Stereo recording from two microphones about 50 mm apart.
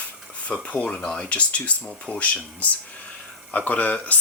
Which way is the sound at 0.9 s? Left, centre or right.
Centre.